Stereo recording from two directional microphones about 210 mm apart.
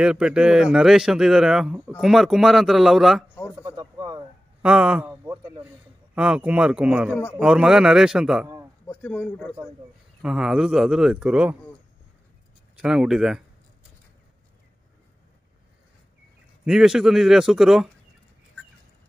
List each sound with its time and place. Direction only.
0.0 s a man's voice: 5° right (ahead or behind)
3.6 s a sound: 20° right (ahead or behind)
4.6 s a sound: 5° right (ahead or behind)
6.1 s a man's voice: 5° right (ahead or behind)
8.8 s speech: 10° left (ahead or behind)
10.2 s a man's voice: 5° right (ahead or behind)
12.8 s a man's voice: 5° right (ahead or behind)
16.6 s a man's voice: centre (ahead or behind)